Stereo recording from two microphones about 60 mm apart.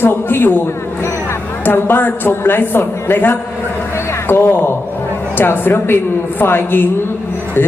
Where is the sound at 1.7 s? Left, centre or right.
Left.